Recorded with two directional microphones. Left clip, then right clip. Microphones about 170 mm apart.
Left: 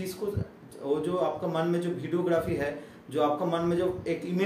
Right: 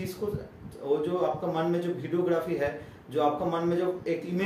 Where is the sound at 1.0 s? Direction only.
20° left (ahead or behind).